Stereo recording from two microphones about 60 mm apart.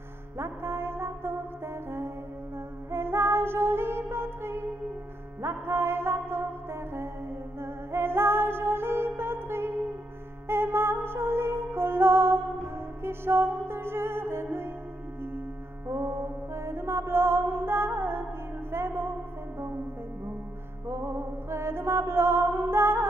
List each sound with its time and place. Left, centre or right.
0.4 s music: right
2.9 s music: right
15.9 s mantra: right
18.7 s music: right
20.8 s music: right